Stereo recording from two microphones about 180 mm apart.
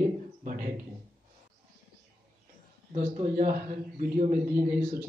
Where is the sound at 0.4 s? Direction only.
45° right (ahead or behind).